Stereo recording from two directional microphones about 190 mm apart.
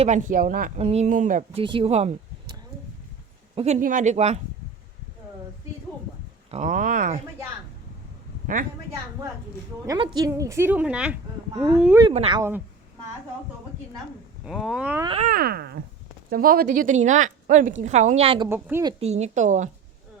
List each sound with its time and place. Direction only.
0.0 s speech: 40° right (ahead or behind)
0.8 s speech: 35° right (ahead or behind)
1.6 s speech: 30° right (ahead or behind)
3.5 s speech: 35° right (ahead or behind)
6.5 s speech: 40° right (ahead or behind)
9.8 s speech: 20° right (ahead or behind); by 11.2 s 5° right (ahead or behind)
12.1 s speech: 30° right (ahead or behind)
12.4 s speech: 10° right (ahead or behind)
14.4 s speech: centre (ahead or behind)
15.0 s speech: 30° right (ahead or behind)
15.3 s speech: 55° right (ahead or behind); by 18.4 s 30° right (ahead or behind)
18.4 s speech: 10° right (ahead or behind)
19.0 s speech: 35° right (ahead or behind)